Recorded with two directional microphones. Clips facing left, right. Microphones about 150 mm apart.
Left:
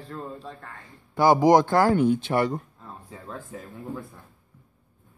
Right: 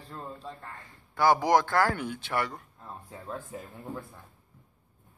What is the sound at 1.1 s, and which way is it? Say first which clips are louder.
Speech: left 6 dB; 20° left (ahead or behind).